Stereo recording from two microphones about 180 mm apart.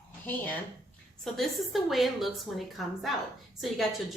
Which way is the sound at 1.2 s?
Centre (ahead or behind).